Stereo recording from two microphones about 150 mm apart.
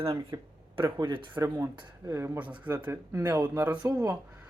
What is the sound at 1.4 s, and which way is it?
Speech, 20° right (ahead or behind).